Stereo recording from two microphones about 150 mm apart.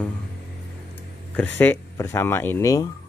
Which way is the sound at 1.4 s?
15° left (ahead or behind).